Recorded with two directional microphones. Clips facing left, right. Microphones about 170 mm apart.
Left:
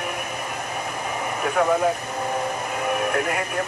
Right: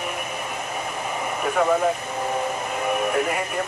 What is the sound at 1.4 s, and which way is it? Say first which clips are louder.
Speech: even; centre (ahead or behind).